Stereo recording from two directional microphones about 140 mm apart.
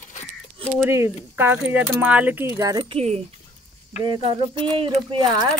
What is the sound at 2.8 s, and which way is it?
Speech, 45° right (ahead or behind).